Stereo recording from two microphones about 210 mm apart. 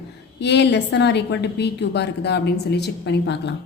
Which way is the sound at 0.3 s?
55° left (ahead or behind).